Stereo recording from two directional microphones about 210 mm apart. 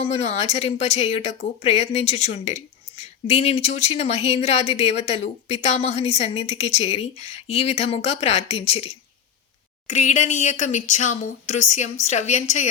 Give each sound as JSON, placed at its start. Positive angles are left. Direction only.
{"t": 0.0, "sound": "speech", "side_deg": 30}